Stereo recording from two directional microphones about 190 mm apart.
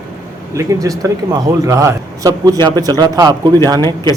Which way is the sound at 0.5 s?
15° right (ahead or behind).